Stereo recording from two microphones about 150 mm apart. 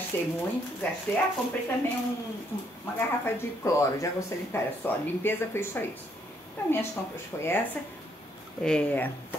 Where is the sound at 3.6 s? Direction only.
20° left (ahead or behind).